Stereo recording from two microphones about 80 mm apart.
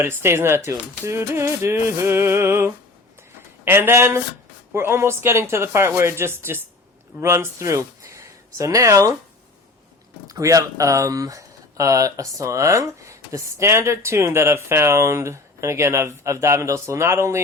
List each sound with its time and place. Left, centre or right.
0.0 s speech: right
10.2 s speech: right